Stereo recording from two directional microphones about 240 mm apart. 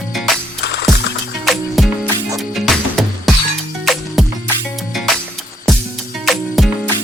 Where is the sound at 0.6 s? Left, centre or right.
Left.